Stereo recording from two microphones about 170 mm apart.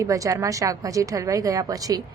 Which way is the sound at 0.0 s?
20° right (ahead or behind).